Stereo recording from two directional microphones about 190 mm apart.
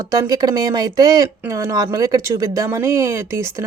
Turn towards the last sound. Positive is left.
turn(degrees=-15)  # may be behind; listen again after turning